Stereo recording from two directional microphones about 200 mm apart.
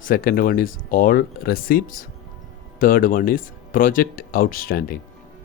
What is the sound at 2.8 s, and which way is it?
Speech, 45° left (ahead or behind).